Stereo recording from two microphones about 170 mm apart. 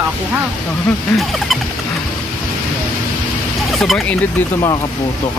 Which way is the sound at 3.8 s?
Centre (ahead or behind).